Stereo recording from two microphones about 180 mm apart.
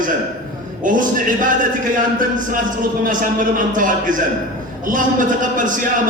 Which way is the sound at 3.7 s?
45° right (ahead or behind).